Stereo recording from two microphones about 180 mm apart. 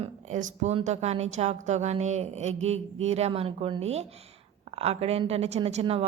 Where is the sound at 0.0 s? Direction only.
45° right (ahead or behind).